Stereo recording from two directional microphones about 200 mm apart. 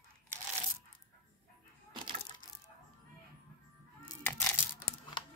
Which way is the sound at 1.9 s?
25° right (ahead or behind).